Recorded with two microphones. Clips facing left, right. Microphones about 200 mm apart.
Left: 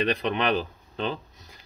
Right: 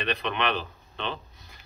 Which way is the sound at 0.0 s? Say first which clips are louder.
Left 4 dB; 40° left (ahead or behind).